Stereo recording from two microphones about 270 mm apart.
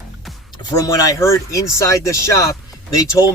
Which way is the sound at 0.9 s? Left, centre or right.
Centre.